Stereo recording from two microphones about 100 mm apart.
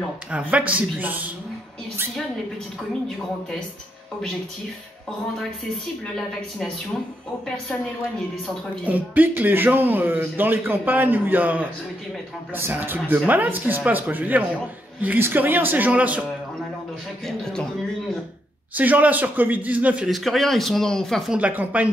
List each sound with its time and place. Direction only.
0.3 s a man's voice: 15° right (ahead or behind)
8.8 s a man's voice: 15° right (ahead or behind)
18.8 s a man's voice: 15° right (ahead or behind)
20.1 s speech: centre (ahead or behind)
21.3 s a man's voice: 15° right (ahead or behind)